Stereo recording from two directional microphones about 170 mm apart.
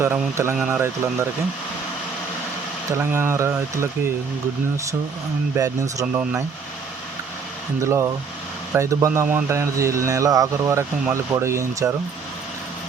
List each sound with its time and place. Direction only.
0.0 s speech: 15° right (ahead or behind)
2.9 s speech: 15° right (ahead or behind)
5.5 s speech: 20° right (ahead or behind)
7.8 s speech: 15° right (ahead or behind)